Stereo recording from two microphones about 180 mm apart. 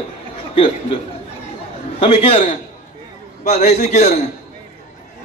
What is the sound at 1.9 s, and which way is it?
Speech, 30° left (ahead or behind).